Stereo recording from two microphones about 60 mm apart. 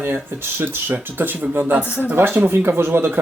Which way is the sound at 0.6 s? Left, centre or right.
Right.